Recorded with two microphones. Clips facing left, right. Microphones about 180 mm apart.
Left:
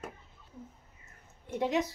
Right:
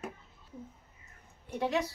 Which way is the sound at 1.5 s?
20° left (ahead or behind).